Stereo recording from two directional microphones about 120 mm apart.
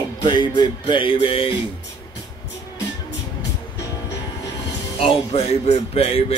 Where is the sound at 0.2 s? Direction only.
40° left (ahead or behind).